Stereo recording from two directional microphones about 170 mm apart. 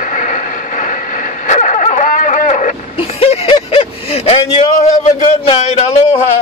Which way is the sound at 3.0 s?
35° left (ahead or behind).